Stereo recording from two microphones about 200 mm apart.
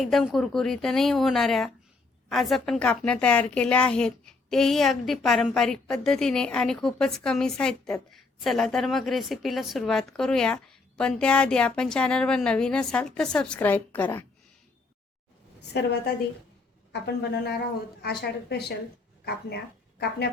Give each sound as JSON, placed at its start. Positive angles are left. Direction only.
{"t": 0.0, "sound": "a woman's voice", "side_deg": 0}
{"t": 15.6, "sound": "a woman's voice", "side_deg": 55}